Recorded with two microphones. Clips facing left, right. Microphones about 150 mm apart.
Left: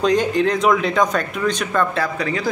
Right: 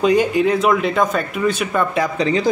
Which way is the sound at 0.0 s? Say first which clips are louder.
Right 2 dB; 10° right (ahead or behind).